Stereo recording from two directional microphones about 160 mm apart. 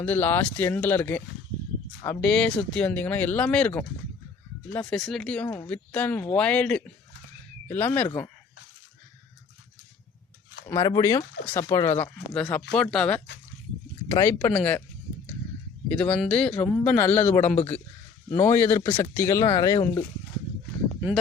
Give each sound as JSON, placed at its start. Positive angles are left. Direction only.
{"t": 0.0, "sound": "speech", "side_deg": 10}
{"t": 10.7, "sound": "speech", "side_deg": 20}
{"t": 12.3, "sound": "speech", "side_deg": 5}
{"t": 15.9, "sound": "speech", "side_deg": 5}